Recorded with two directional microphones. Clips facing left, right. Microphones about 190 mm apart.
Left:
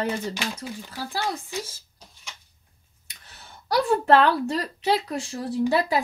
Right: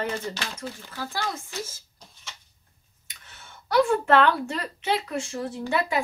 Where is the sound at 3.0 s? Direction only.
35° left (ahead or behind).